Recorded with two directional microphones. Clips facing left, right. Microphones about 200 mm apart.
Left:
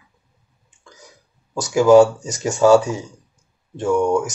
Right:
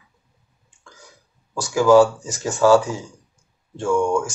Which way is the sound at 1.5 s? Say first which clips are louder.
Left 2 dB; 20° left (ahead or behind).